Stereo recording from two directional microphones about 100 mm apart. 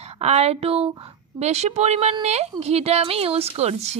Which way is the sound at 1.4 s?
90° right.